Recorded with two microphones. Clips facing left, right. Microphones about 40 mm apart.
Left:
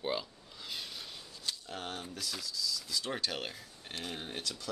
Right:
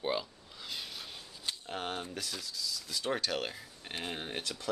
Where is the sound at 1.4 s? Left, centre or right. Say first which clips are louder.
Right 3 dB; right.